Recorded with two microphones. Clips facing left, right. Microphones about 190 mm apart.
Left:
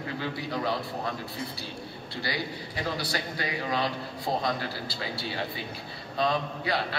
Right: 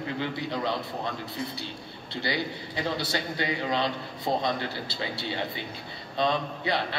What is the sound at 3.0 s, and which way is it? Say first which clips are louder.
A man's voice: right 2 dB; 25° right (ahead or behind).